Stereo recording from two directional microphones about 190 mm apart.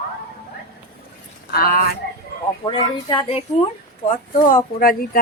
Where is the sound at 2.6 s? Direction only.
25° left (ahead or behind).